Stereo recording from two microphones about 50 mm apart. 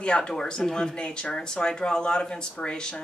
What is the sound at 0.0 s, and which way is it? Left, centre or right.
Speech, left.